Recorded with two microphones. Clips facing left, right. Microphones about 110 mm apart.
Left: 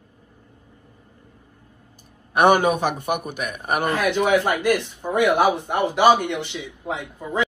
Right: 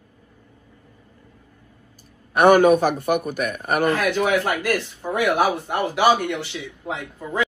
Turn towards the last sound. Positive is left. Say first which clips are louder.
# even
turn(degrees=15)  # may be behind; listen again after turning